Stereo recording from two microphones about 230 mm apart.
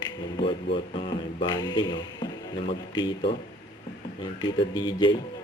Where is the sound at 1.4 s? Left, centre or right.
Centre.